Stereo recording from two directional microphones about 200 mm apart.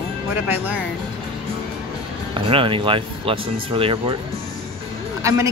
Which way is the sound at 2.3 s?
25° right (ahead or behind).